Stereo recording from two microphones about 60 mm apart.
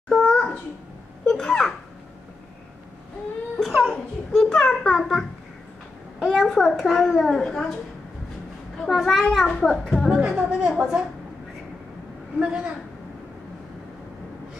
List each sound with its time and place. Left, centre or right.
0.1 s a sound: centre
1.2 s babbling: centre
3.6 s a child's voice: centre
6.2 s a child's voice: centre
8.7 s a child's voice: centre
9.5 s a child's voice: centre
10.0 s a woman's voice: centre
10.3 s a woman's voice: centre
10.7 s a child's voice: centre
12.4 s a woman's voice: centre